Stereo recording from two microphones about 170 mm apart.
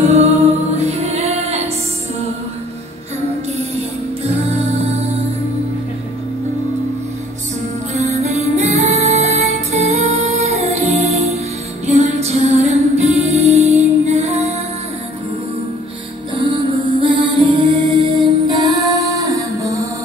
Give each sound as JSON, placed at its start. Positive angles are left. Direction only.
{"t": 0.7, "sound": "music", "side_deg": -40}
{"t": 7.9, "sound": "music", "side_deg": -40}
{"t": 16.4, "sound": "music", "side_deg": -30}